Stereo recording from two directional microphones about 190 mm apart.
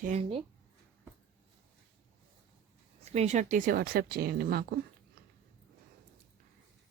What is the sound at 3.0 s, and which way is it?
Speech, 35° right (ahead or behind).